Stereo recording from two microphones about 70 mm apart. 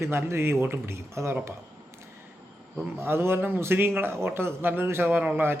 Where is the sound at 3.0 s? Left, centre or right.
Right.